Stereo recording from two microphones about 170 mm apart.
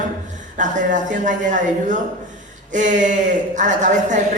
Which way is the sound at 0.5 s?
50° right (ahead or behind).